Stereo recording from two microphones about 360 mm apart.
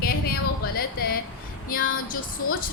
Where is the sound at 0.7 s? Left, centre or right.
Left.